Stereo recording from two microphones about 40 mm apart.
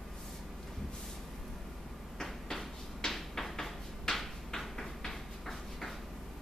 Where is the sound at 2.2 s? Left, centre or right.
Centre.